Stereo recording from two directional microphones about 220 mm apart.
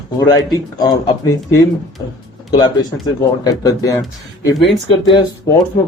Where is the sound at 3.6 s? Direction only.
15° left (ahead or behind).